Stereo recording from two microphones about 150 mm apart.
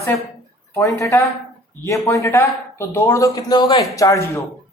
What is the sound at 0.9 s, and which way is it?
Speech, 20° left (ahead or behind).